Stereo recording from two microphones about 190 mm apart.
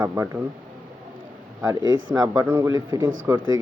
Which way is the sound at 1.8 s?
90° right.